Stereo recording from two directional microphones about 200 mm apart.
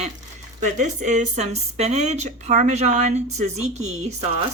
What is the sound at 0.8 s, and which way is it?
Speech, 40° right (ahead or behind).